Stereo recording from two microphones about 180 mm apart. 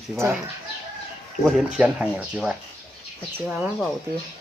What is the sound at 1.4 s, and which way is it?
Speech, centre (ahead or behind).